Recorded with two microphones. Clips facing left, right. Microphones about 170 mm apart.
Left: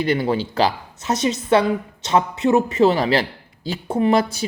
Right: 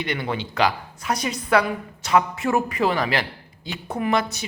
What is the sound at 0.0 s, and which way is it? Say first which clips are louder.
Speech: left 7 dB; 35° left (ahead or behind).